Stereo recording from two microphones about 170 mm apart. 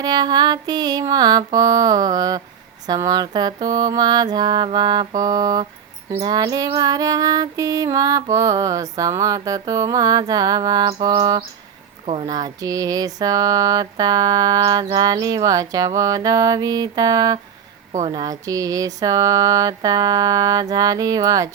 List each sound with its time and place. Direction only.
0.0 s female singing: 25° right (ahead or behind)